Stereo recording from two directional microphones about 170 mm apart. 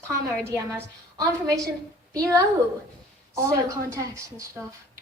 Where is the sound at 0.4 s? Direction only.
15° right (ahead or behind).